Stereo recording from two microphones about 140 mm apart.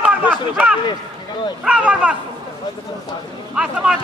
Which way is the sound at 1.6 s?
10° right (ahead or behind).